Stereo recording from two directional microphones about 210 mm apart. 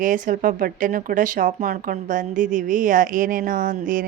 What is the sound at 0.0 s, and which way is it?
Speech, 40° right (ahead or behind).